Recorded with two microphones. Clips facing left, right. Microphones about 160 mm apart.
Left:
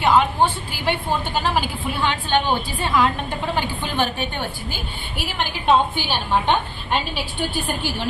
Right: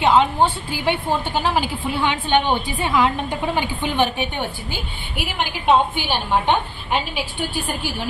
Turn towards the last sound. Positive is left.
turn(degrees=-15)  # may be behind; listen again after turning